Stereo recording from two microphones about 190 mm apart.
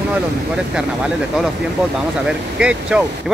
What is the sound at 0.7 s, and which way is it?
Speech, 5° right (ahead or behind).